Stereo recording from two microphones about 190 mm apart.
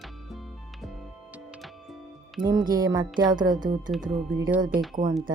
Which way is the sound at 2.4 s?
25° right (ahead or behind).